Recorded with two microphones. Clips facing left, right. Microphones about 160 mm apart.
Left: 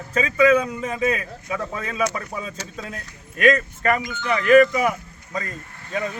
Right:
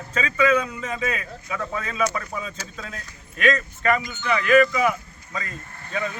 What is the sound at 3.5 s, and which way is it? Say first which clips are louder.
Speech: left 1 dB; 40° left (ahead or behind).